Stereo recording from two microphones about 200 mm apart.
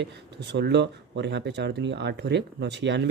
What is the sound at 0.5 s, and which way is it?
Speech, 60° right (ahead or behind).